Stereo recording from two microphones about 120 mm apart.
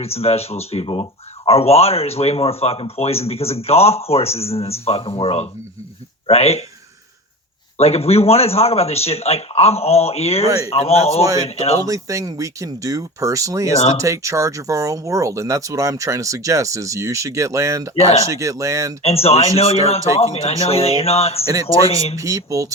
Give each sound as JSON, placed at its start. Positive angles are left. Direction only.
{"t": 0.0, "sound": "speech", "side_deg": 55}
{"t": 7.8, "sound": "speech", "side_deg": 60}
{"t": 11.2, "sound": "speech", "side_deg": -30}
{"t": 11.4, "sound": "speech", "side_deg": 55}
{"t": 11.9, "sound": "speech", "side_deg": -25}
{"t": 19.0, "sound": "speech", "side_deg": 55}
{"t": 21.4, "sound": "speech", "side_deg": -30}
{"t": 21.8, "sound": "speech", "side_deg": 55}
{"t": 22.2, "sound": "speech", "side_deg": -25}